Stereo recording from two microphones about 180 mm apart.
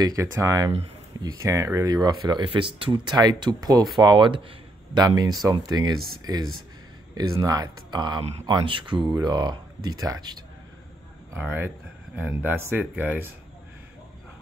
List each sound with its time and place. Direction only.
0.0 s speech: 20° right (ahead or behind)
7.2 s speech: 20° right (ahead or behind)
8.2 s speech: 35° right (ahead or behind)
8.5 s speech: 25° right (ahead or behind); by 13.3 s 10° right (ahead or behind)